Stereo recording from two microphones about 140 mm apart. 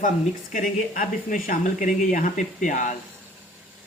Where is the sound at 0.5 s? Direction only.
70° left (ahead or behind).